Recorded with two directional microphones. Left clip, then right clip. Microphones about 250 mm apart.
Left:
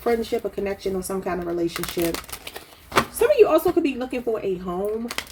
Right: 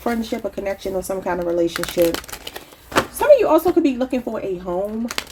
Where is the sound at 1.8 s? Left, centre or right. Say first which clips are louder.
Right 7 dB; centre.